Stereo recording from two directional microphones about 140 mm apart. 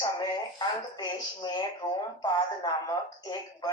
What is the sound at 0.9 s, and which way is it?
Speech, 30° left (ahead or behind).